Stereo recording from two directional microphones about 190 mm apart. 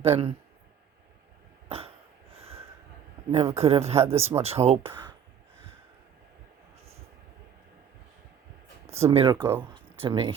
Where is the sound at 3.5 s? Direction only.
35° right (ahead or behind).